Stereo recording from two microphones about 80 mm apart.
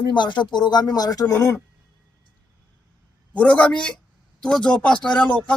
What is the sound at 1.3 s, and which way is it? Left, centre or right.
Speech, left.